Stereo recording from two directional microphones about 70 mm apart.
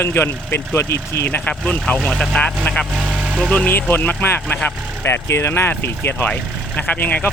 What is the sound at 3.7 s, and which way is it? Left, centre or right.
Speech, left.